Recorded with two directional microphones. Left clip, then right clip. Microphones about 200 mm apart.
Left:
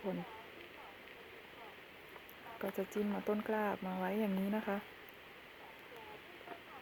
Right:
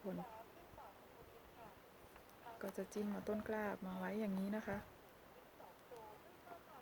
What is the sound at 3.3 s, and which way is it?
Speech, 30° left (ahead or behind).